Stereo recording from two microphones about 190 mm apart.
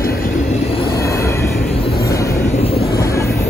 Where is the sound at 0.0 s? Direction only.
50° left (ahead or behind).